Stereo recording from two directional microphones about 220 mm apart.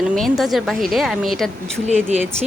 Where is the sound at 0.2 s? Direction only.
Centre (ahead or behind).